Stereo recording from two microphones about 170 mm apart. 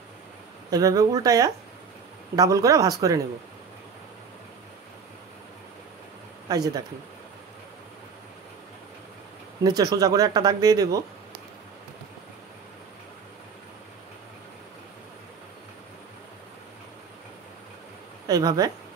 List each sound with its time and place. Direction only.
0.7 s speech: 20° right (ahead or behind)
6.5 s speech: 20° right (ahead or behind)
9.6 s speech: 25° right (ahead or behind)
18.2 s speech: 20° right (ahead or behind)